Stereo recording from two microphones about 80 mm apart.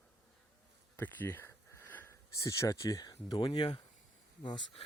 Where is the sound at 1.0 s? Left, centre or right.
Left.